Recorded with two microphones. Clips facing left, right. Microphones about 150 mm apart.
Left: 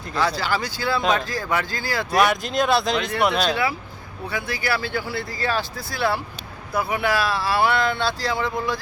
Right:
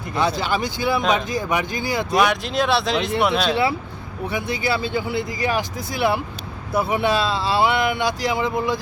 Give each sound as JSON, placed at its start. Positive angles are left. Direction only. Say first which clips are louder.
{"t": 0.2, "sound": "speech", "louder": "right 2 dB", "side_deg": -20}
{"t": 2.1, "sound": "speech", "louder": "even", "side_deg": 0}
{"t": 3.5, "sound": "speech", "louder": "right 3 dB", "side_deg": -25}